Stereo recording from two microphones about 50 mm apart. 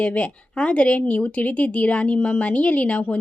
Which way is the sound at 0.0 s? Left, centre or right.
Left.